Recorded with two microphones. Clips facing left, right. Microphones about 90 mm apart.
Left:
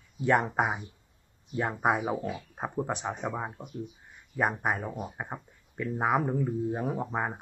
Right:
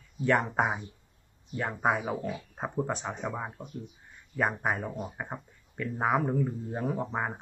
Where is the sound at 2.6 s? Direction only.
10° left (ahead or behind).